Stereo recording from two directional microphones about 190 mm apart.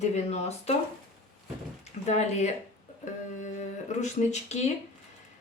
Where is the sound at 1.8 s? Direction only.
35° left (ahead or behind).